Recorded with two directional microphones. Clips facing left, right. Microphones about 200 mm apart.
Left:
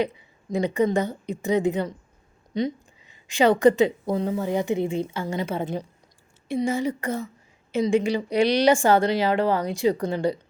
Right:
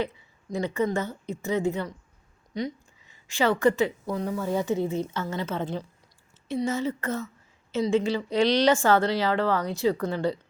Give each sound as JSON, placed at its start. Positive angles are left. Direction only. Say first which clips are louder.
{"t": 0.0, "sound": "a woman's voice", "louder": "left 4 dB", "side_deg": 15}